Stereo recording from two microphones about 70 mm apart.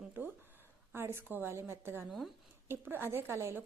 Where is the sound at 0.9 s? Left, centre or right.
Right.